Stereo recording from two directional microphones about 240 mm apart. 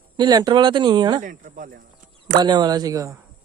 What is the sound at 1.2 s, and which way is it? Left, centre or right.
Speech, right.